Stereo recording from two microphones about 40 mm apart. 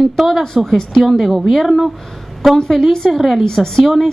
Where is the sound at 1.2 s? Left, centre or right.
Centre.